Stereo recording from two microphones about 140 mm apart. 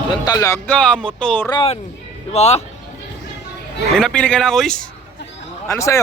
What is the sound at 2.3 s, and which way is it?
Speech, 50° left (ahead or behind).